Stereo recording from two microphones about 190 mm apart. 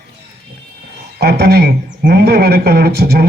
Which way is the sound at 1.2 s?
60° right (ahead or behind).